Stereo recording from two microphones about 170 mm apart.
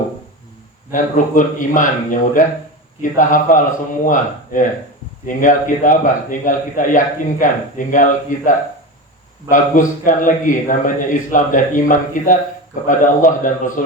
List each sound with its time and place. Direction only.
0.9 s a man's voice: 50° left (ahead or behind)